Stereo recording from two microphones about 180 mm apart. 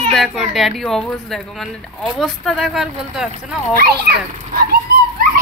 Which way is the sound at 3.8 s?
60° right (ahead or behind).